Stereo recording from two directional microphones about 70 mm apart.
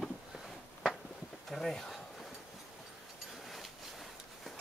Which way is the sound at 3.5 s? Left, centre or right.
Centre.